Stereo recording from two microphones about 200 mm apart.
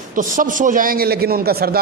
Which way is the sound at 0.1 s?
40° right (ahead or behind).